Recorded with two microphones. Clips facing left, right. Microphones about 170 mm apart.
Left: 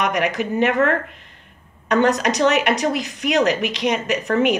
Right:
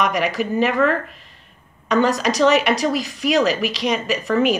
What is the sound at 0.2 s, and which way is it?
Speech, 20° left (ahead or behind).